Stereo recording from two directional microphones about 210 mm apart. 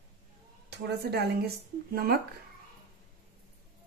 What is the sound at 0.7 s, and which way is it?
Speech, 50° right (ahead or behind).